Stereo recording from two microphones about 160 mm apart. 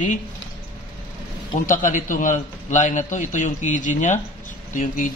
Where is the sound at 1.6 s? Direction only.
55° left (ahead or behind).